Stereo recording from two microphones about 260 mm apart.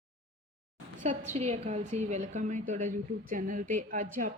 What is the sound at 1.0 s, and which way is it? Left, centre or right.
A woman's voice, right.